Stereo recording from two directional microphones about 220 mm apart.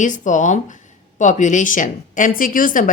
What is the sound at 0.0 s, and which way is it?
Speech, 35° left (ahead or behind).